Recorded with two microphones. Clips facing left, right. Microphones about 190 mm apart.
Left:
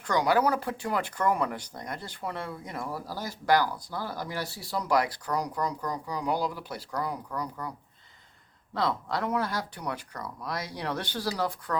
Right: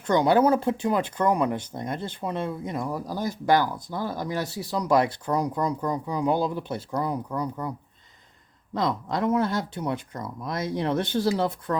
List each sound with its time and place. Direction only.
0.1 s speech: 25° right (ahead or behind)
8.7 s speech: 20° right (ahead or behind)